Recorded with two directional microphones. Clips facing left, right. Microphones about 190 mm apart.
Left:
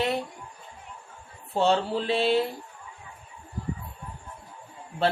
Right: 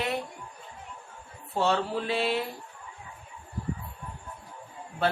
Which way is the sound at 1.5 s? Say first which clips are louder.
Left 3 dB; 25° left (ahead or behind).